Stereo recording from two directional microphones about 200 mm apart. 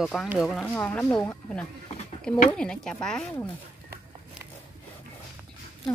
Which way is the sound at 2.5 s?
5° left (ahead or behind).